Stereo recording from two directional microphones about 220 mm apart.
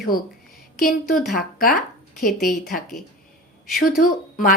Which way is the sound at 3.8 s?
40° left (ahead or behind).